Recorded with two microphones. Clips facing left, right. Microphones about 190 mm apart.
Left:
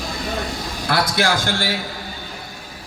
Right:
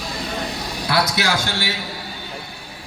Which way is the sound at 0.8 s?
50° left (ahead or behind).